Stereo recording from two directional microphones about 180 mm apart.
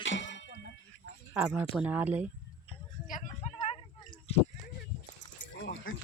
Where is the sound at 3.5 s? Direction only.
35° left (ahead or behind).